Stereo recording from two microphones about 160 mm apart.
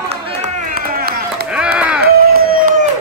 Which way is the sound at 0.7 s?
65° right (ahead or behind).